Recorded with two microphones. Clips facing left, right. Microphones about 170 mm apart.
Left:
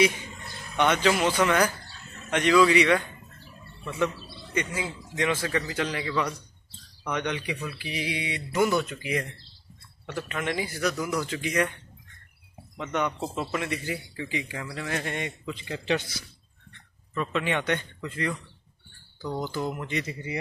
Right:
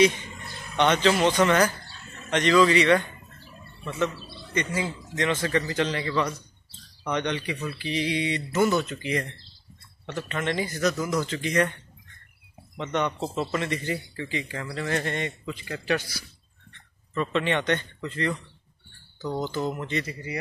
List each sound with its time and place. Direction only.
0.7 s speech: 10° left (ahead or behind)
4.6 s speech: 5° left (ahead or behind)
12.7 s speech: 10° left (ahead or behind)
15.5 s a man's voice: 20° left (ahead or behind)
17.1 s speech: 5° left (ahead or behind); by 20.3 s 25° left (ahead or behind)